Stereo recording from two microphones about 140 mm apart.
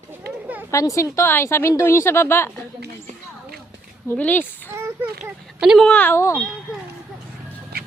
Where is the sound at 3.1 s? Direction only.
60° right (ahead or behind).